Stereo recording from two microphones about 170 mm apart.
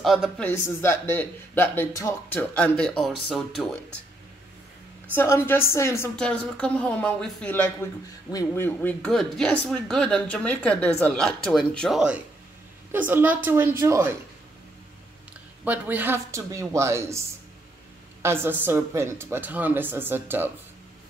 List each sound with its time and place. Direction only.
0.0 s speech: centre (ahead or behind)
0.4 s speech: 15° left (ahead or behind)
5.1 s speech: 15° left (ahead or behind); by 14.1 s 15° right (ahead or behind)
15.6 s speech: 10° right (ahead or behind)
18.2 s speech: 15° right (ahead or behind)